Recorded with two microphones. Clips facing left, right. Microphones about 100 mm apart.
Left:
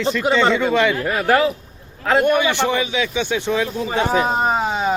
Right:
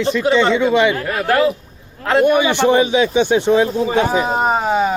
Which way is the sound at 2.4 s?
20° right (ahead or behind).